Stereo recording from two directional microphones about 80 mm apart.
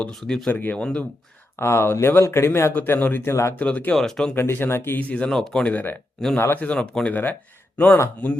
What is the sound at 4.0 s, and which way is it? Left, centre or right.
Speech, centre.